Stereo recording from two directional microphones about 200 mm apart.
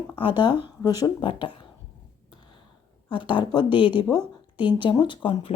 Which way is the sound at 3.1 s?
25° left (ahead or behind).